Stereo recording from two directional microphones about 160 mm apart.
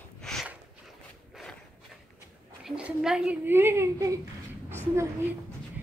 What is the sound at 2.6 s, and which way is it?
A woman's voice, 5° right (ahead or behind).